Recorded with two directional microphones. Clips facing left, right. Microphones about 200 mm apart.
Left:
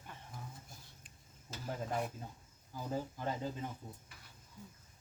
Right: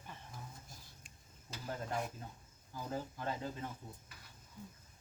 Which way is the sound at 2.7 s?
15° left (ahead or behind).